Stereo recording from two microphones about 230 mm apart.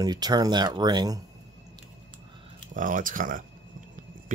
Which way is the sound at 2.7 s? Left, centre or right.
Right.